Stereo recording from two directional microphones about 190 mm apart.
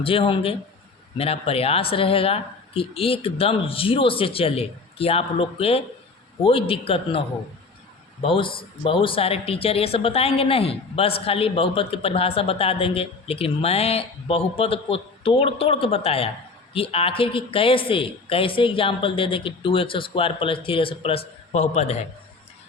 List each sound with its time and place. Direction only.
0.0 s speech: 30° left (ahead or behind)